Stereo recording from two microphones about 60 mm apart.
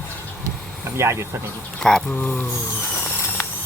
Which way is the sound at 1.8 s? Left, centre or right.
Centre.